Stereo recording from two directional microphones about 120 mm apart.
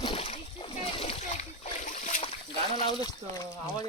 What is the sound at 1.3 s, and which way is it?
Splash, 90° left.